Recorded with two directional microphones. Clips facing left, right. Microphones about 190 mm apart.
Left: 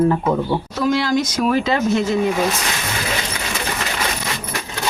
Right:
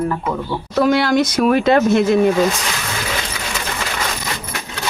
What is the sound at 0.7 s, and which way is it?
Speech, 65° right (ahead or behind).